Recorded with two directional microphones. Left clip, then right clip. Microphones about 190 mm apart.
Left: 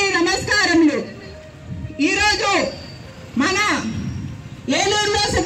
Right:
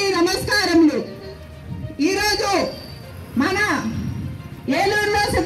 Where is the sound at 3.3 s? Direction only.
20° left (ahead or behind).